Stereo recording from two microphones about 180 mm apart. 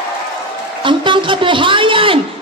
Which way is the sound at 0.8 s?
25° right (ahead or behind).